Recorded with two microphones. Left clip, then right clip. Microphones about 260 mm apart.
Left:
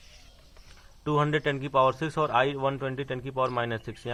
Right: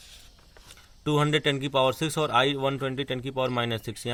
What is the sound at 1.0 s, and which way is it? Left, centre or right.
A man's voice, right.